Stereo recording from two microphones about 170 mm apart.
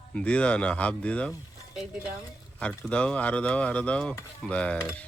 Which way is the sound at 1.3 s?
5° right (ahead or behind).